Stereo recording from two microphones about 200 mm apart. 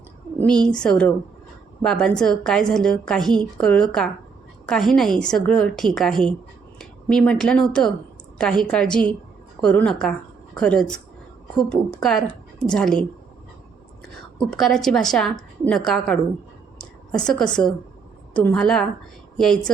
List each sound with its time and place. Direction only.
0.3 s a woman's voice: 5° left (ahead or behind)
14.5 s a woman's voice: centre (ahead or behind)